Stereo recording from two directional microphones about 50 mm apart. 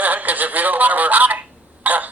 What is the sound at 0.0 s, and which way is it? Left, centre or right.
Telephone, right.